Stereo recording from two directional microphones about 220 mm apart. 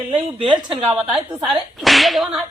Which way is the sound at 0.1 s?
25° right (ahead or behind).